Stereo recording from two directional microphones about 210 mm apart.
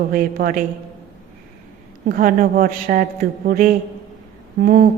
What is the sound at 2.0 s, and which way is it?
A woman's voice, 45° right (ahead or behind).